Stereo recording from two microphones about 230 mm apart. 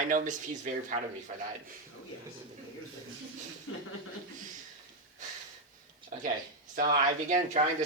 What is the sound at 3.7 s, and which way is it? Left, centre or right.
Chuckle, left.